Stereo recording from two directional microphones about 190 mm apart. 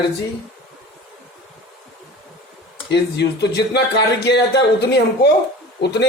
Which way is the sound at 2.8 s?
60° left (ahead or behind).